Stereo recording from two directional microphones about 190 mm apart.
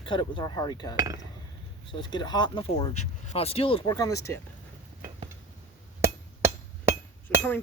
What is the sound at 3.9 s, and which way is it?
Cutlery, 20° left (ahead or behind).